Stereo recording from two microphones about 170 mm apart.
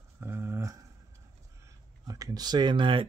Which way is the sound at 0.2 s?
15° right (ahead or behind).